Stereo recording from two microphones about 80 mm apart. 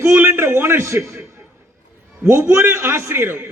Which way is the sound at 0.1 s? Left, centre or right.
Right.